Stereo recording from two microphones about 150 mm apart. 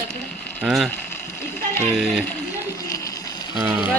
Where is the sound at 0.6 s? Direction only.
Centre (ahead or behind).